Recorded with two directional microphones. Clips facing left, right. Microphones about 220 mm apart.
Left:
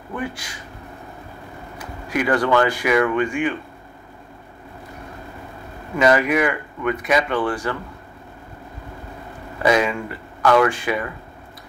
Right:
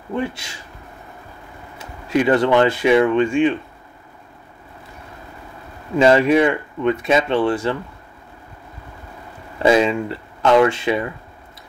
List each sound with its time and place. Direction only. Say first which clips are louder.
0.1 s speech: right 4 dB; 25° right (ahead or behind)
1.8 s speech: right 5 dB; 25° right (ahead or behind)
5.9 s speech: right 4 dB; 25° right (ahead or behind)
9.6 s speech: right 4 dB; 25° right (ahead or behind)